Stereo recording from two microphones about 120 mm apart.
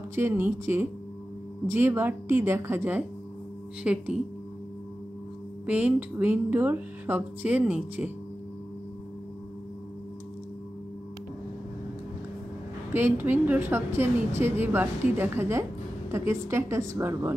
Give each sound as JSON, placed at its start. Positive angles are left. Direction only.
{"t": 0.1, "sound": "speech", "side_deg": -20}
{"t": 5.7, "sound": "speech", "side_deg": -10}
{"t": 12.9, "sound": "speech", "side_deg": -15}